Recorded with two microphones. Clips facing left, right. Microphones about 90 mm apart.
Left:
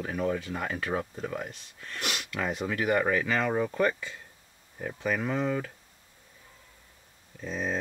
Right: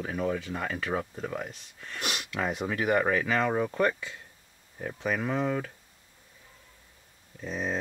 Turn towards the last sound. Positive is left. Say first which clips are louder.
# even
turn(degrees=-15)  # may be behind; listen again after turning